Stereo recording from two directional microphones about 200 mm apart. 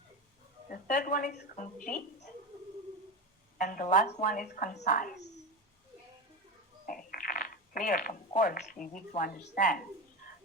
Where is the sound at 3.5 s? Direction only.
45° left (ahead or behind).